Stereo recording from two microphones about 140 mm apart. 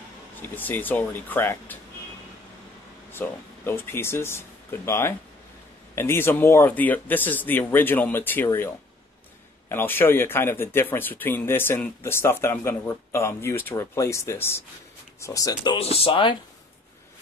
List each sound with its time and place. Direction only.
0.4 s speech: 15° left (ahead or behind)
3.1 s speech: 15° left (ahead or behind)
9.7 s speech: 15° left (ahead or behind)
15.8 s speech: 45° left (ahead or behind)